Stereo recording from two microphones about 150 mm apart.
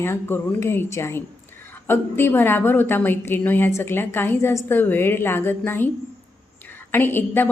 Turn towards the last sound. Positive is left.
turn(degrees=15)  # may be behind; listen again after turning